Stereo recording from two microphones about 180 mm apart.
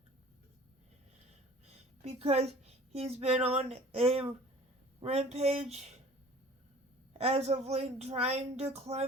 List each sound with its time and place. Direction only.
1.6 s a sound: 35° right (ahead or behind)
2.9 s speech: 35° right (ahead or behind)
7.2 s speech: 35° right (ahead or behind)